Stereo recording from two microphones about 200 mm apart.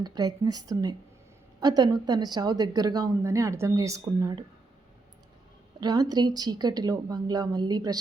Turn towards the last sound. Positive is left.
turn(degrees=-20)  # may be behind; listen again after turning